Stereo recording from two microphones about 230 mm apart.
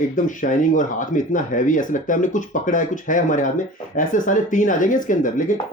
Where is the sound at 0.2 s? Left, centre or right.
Left.